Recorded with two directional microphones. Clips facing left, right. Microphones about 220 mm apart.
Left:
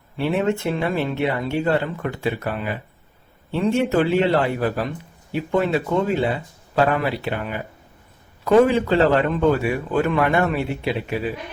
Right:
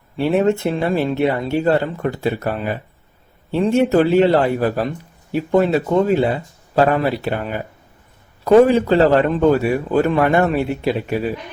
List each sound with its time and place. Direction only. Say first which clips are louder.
0.2 s speech: right 5 dB; 40° right (ahead or behind)